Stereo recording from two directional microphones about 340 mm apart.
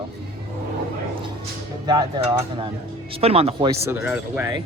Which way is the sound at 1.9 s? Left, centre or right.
Centre.